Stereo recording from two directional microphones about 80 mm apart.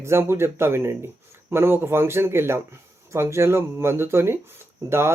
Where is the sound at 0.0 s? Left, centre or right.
Right.